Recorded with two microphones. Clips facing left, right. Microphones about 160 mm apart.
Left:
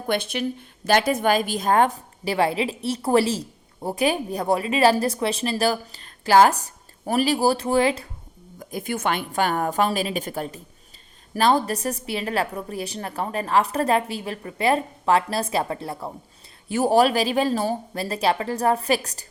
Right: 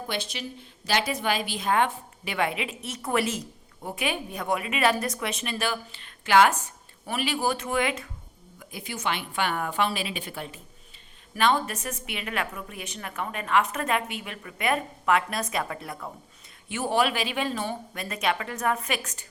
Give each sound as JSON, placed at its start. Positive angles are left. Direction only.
{"t": 0.1, "sound": "a woman's voice", "side_deg": 55}
{"t": 8.5, "sound": "a woman's voice", "side_deg": 45}